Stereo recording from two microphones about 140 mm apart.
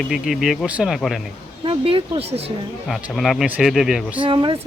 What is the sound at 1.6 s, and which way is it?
Speech, 40° right (ahead or behind).